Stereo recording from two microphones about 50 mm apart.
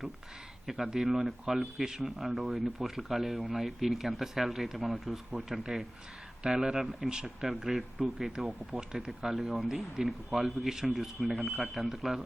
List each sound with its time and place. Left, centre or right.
1.0 s speech: centre
7.5 s speech: centre